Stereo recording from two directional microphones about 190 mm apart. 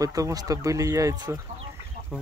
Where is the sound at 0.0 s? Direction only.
20° right (ahead or behind).